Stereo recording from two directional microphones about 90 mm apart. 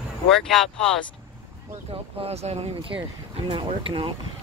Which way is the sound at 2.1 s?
90° right.